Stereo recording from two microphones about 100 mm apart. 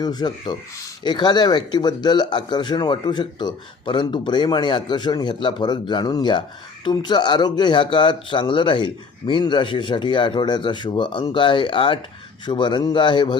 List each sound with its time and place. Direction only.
0.0 s speech: 45° left (ahead or behind); by 11.9 s 60° left (ahead or behind)
12.5 s speech: 50° left (ahead or behind)